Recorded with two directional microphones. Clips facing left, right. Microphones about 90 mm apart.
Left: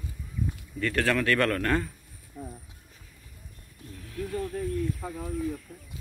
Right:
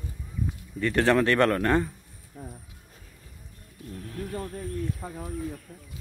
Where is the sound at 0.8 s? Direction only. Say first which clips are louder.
Right 4 dB; 25° right (ahead or behind).